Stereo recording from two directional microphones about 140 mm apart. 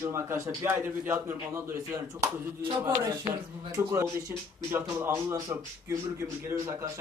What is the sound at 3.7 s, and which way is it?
Speech, 20° right (ahead or behind).